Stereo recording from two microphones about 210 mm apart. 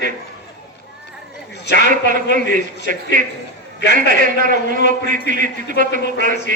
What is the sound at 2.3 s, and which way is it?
Speech, 40° right (ahead or behind).